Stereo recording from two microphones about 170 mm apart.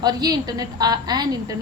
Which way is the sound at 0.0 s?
25° right (ahead or behind).